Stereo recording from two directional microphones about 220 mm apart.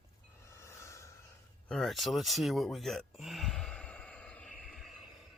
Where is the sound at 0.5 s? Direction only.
10° left (ahead or behind).